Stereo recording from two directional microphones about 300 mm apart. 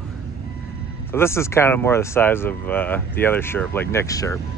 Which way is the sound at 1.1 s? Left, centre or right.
Centre.